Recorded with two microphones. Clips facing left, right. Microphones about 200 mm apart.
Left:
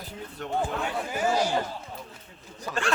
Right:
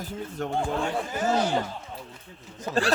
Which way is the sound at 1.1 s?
10° left (ahead or behind).